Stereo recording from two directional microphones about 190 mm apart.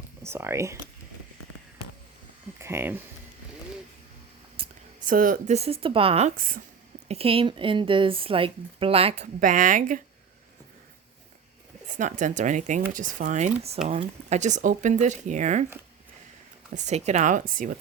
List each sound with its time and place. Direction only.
0.2 s speech: 15° right (ahead or behind)
2.6 s speech: 15° right (ahead or behind)
4.6 s a sound: 30° right (ahead or behind)
5.0 s speech: 45° right (ahead or behind)
7.1 s a woman's voice: 30° right (ahead or behind)
11.9 s speech: 40° right (ahead or behind)
16.7 s speech: 35° right (ahead or behind)